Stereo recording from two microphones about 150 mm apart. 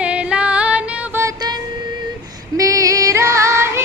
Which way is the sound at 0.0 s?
10° right (ahead or behind).